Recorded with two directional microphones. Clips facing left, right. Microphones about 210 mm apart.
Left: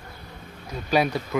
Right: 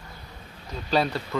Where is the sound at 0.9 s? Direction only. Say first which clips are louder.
Left 2 dB; 15° left (ahead or behind).